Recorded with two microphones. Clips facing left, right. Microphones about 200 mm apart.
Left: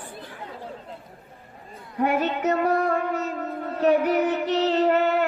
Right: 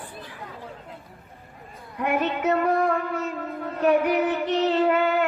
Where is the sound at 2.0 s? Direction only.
35° left (ahead or behind).